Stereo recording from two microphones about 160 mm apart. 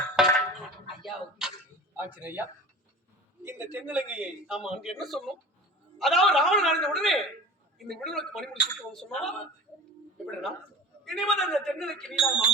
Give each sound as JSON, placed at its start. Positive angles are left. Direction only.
{"t": 0.2, "sound": "a sound", "side_deg": -5}
{"t": 2.0, "sound": "a man's voice", "side_deg": -10}
{"t": 11.0, "sound": "a man's voice", "side_deg": 0}